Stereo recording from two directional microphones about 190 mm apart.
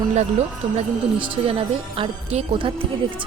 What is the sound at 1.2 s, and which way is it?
A woman's voice, 30° right (ahead or behind).